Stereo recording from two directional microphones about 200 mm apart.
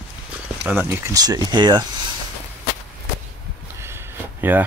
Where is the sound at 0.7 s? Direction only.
10° right (ahead or behind).